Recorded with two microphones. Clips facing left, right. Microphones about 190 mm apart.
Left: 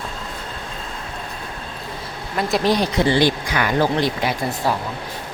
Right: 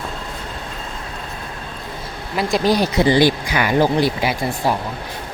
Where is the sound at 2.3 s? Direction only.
5° right (ahead or behind).